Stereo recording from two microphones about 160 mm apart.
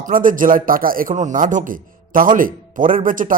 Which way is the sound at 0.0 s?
60° right (ahead or behind).